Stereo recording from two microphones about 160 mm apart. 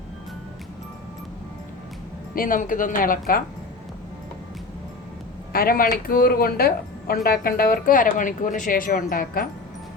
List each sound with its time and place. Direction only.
2.3 s speech: 60° left (ahead or behind)
5.5 s speech: 65° left (ahead or behind)